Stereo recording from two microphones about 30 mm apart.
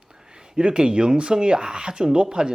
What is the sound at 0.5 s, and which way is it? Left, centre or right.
Speech, right.